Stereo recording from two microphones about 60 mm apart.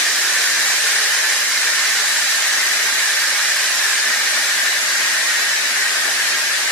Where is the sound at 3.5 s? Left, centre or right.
Centre.